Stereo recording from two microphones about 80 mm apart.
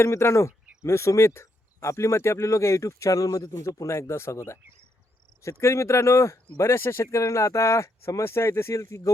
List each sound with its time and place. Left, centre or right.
0.0 s speech: left